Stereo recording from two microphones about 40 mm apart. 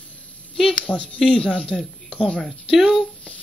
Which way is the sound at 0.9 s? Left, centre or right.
Left.